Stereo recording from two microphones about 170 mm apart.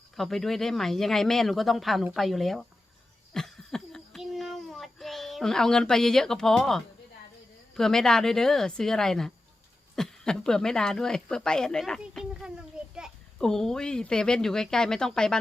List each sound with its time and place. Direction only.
0.2 s speech: centre (ahead or behind)
3.3 s a sound: 5° left (ahead or behind)
7.8 s speech: 5° left (ahead or behind)